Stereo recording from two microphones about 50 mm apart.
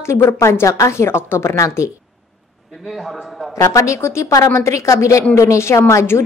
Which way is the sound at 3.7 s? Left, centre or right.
Left.